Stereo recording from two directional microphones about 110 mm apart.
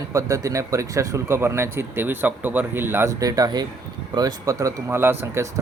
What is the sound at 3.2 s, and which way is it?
Speech, 35° right (ahead or behind).